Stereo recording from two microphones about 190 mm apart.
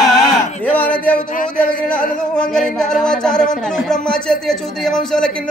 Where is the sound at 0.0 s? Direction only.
Centre (ahead or behind).